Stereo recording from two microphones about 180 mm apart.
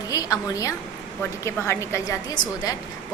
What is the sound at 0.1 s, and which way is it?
A woman's voice, 20° left (ahead or behind).